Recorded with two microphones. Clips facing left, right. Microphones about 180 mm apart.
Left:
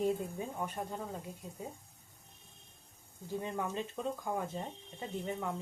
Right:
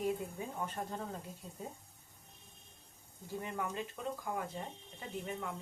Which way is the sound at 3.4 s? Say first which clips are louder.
Left 2 dB; 20° left (ahead or behind).